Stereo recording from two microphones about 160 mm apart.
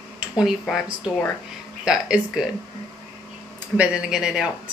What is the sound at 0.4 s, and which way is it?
Speech, centre (ahead or behind).